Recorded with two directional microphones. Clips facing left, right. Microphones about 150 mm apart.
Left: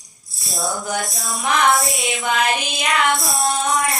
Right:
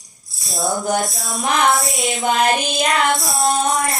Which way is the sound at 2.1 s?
40° right (ahead or behind).